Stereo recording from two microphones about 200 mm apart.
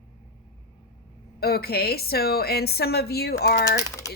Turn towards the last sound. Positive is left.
turn(degrees=15)  # may be behind; listen again after turning